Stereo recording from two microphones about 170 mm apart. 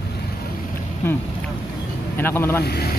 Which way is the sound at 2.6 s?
70° left (ahead or behind).